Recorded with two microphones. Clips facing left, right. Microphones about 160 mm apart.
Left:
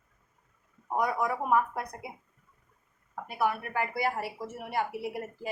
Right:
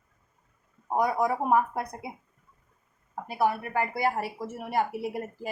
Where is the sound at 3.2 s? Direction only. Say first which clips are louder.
Right 3 dB; 35° right (ahead or behind).